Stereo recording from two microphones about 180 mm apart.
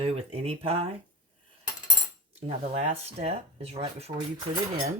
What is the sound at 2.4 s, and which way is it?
Speech, 35° right (ahead or behind).